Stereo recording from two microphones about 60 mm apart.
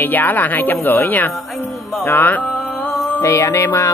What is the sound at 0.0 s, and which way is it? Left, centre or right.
Speech, left.